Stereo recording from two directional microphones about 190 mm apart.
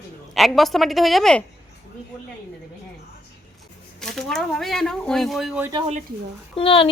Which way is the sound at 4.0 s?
Centre (ahead or behind).